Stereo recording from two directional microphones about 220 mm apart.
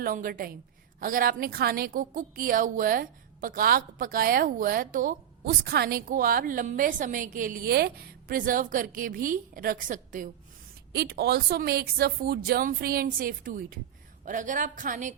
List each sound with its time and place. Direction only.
0.0 s a woman's voice: 40° right (ahead or behind)
10.9 s a woman's voice: 45° right (ahead or behind)